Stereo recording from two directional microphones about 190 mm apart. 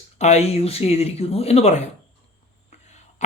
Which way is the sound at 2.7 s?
35° left (ahead or behind).